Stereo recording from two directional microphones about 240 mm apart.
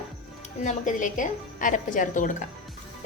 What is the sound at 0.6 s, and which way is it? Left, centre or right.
A woman's voice, left.